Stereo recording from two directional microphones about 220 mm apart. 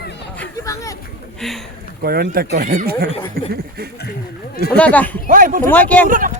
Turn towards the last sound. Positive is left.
turn(degrees=5)  # may be behind; listen again after turning